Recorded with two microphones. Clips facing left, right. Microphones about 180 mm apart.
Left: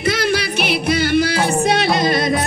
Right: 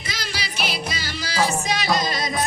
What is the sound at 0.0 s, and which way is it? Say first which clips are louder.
Music: left 14 dB; 60° left (ahead or behind).